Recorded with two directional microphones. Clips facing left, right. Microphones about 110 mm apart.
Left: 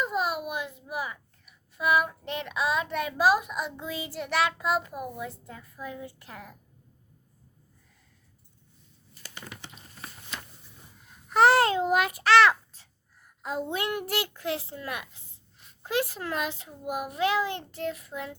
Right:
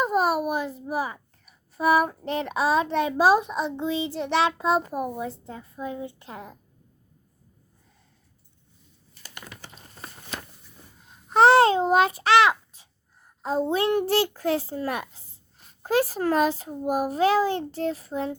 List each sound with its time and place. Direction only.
0.0 s a child's voice: 40° right (ahead or behind); by 4.9 s 25° right (ahead or behind)
4.9 s speech: 40° right (ahead or behind); by 6.6 s 25° right (ahead or behind)
11.1 s a child's voice: 25° right (ahead or behind)
12.3 s a sound: 15° right (ahead or behind)
13.2 s a child's voice: 30° right (ahead or behind)